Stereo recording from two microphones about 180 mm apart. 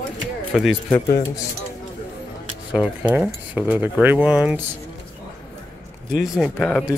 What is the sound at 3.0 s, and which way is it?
Speech, 5° right (ahead or behind).